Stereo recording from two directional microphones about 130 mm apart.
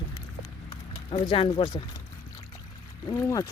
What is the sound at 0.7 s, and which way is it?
Speech, 45° left (ahead or behind).